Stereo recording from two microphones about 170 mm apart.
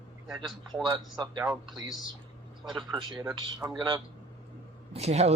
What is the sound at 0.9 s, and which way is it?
Speech, 25° right (ahead or behind).